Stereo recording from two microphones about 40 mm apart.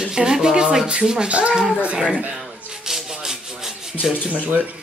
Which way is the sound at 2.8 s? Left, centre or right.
Centre.